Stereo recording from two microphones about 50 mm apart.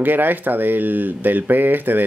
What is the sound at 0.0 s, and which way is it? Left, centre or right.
Speech, right.